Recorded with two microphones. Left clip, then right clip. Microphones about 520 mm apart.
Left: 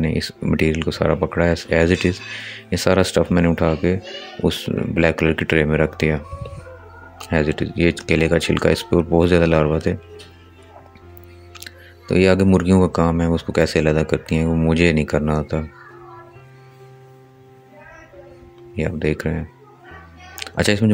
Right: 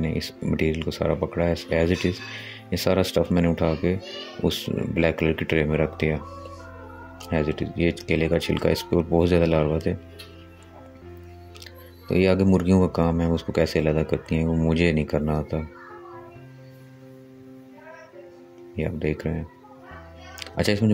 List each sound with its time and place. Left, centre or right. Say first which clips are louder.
0.0 s speech: left 6 dB; right
11.6 s speech: left 5 dB; right
18.8 s speech: left 5 dB; right